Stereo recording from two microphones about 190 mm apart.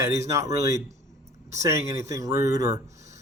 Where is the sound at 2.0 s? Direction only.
15° right (ahead or behind).